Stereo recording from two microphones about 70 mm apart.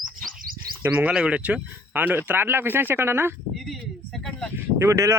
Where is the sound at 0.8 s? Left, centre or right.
Right.